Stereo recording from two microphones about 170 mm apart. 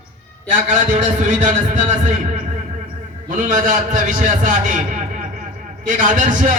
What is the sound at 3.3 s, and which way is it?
A man's voice, 50° right (ahead or behind).